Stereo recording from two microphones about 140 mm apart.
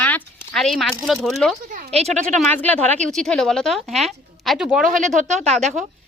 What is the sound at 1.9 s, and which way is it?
Speech, 50° right (ahead or behind).